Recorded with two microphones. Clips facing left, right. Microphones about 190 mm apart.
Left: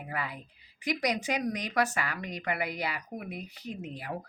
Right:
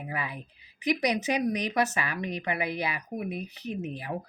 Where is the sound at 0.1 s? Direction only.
15° right (ahead or behind).